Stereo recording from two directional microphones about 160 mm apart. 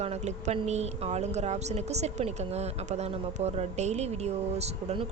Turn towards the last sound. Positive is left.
turn(degrees=-40)  # may be behind; listen again after turning